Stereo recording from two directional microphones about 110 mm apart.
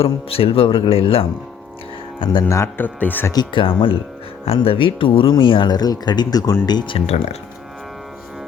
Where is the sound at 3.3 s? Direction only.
45° left (ahead or behind).